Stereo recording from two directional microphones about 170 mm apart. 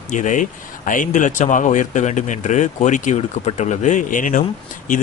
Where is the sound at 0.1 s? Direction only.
50° left (ahead or behind).